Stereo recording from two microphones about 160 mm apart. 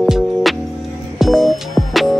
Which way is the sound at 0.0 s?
Centre (ahead or behind).